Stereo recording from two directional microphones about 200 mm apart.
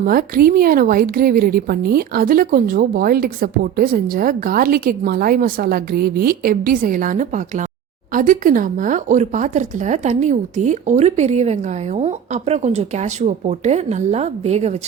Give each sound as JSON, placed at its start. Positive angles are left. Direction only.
{"t": 0.0, "sound": "a woman's voice", "side_deg": -45}